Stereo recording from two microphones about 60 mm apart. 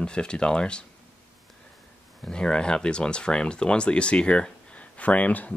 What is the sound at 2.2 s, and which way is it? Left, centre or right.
Speech, centre.